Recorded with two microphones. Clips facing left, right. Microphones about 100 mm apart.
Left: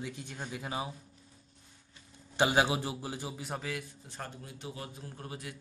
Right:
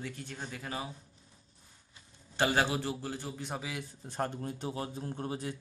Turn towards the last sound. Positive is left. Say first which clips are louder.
# right 7 dB
turn(degrees=-30)  # may be behind; listen again after turning